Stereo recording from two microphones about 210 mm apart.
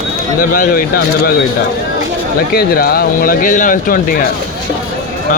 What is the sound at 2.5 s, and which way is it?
Speech, 45° left (ahead or behind).